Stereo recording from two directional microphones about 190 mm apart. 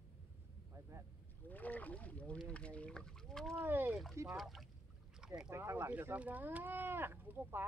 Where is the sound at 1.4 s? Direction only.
10° left (ahead or behind).